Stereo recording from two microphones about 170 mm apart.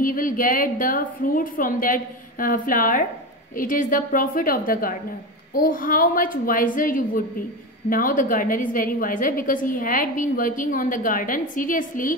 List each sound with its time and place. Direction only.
0.0 s a woman's voice: 55° left (ahead or behind)